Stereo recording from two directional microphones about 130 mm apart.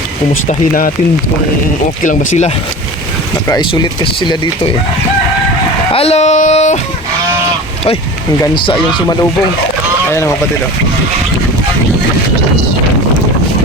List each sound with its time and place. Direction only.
0.4 s speech: 90° left
2.0 s speech: 70° left (ahead or behind)
3.6 s speech: 40° left (ahead or behind)
5.9 s speech: 50° left (ahead or behind)
8.5 s speech: 40° left (ahead or behind)
10.1 s speech: 20° left (ahead or behind)